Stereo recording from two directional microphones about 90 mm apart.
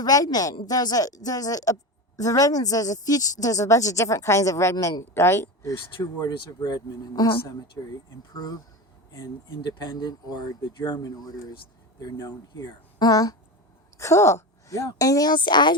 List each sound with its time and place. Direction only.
0.0 s a woman's voice: 45° left (ahead or behind)
6.0 s speech: 45° left (ahead or behind)
8.3 s speech: 45° left (ahead or behind)
9.6 s speech: 50° left (ahead or behind)
14.0 s a woman's voice: 35° left (ahead or behind); by 15.7 s 55° left (ahead or behind)